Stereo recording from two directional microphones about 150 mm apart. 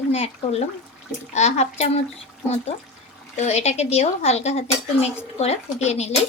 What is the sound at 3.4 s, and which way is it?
Speech, 45° left (ahead or behind).